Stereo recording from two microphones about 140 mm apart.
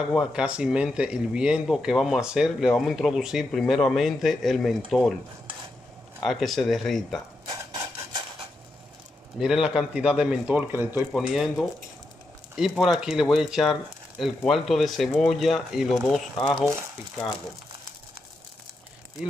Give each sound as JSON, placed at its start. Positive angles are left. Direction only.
{"t": 0.1, "sound": "speech", "side_deg": -5}
{"t": 6.2, "sound": "speech", "side_deg": 0}
{"t": 7.4, "sound": "rub", "side_deg": -25}
{"t": 9.4, "sound": "a man's voice", "side_deg": -5}
{"t": 11.1, "sound": "speech", "side_deg": 0}
{"t": 12.5, "sound": "speech", "side_deg": -5}